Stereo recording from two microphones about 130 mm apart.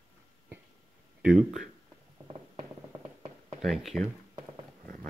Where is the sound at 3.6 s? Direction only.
Centre (ahead or behind).